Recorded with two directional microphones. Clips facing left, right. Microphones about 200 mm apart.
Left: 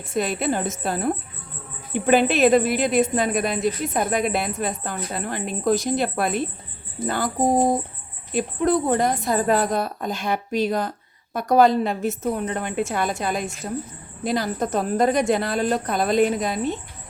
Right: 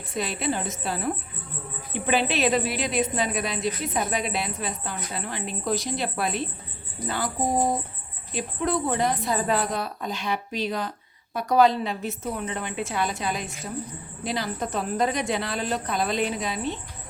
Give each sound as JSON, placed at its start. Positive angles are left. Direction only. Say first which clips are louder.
{"t": 0.1, "sound": "speech", "louder": "left 5 dB", "side_deg": 50}
{"t": 7.0, "sound": "speech", "louder": "left 5 dB", "side_deg": 25}
{"t": 8.3, "sound": "speech", "louder": "left 6 dB", "side_deg": 50}